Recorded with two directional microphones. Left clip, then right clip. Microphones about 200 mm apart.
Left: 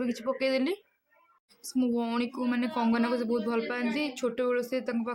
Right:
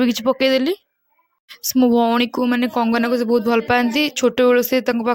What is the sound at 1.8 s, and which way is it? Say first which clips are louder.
Speech: right 14 dB; 35° right (ahead or behind).